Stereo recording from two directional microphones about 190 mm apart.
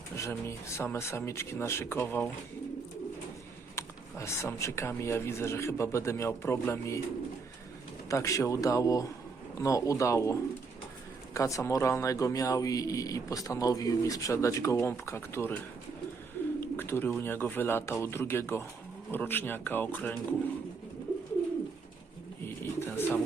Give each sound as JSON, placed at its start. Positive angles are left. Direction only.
{"t": 0.2, "sound": "speech", "side_deg": 15}
{"t": 3.8, "sound": "speech", "side_deg": 15}
{"t": 8.1, "sound": "speech", "side_deg": 15}
{"t": 16.6, "sound": "bird", "side_deg": 10}
{"t": 17.2, "sound": "speech", "side_deg": 10}
{"t": 22.4, "sound": "bird", "side_deg": 10}